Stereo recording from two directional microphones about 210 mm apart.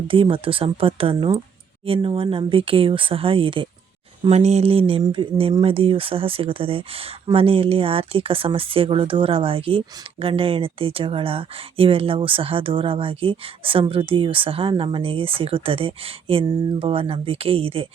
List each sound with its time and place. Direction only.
0.1 s speech: 25° right (ahead or behind)